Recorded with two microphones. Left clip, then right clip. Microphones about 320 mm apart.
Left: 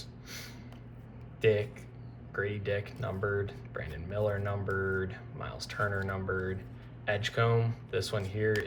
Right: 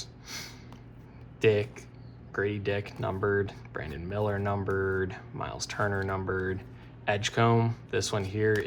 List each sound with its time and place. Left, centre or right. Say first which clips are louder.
0.0 s snort: right 5 dB; centre
1.4 s speech: right 3 dB; centre